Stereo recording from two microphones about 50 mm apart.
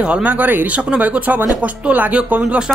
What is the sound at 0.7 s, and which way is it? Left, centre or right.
Speech, right.